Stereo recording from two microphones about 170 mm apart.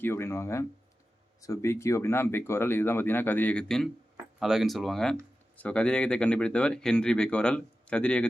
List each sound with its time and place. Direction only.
0.0 s speech: 15° left (ahead or behind)